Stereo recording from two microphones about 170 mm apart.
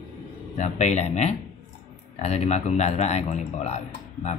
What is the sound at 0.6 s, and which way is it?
Speech, 40° left (ahead or behind).